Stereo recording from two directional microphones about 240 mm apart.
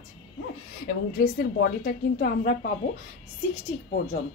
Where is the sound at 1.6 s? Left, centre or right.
Left.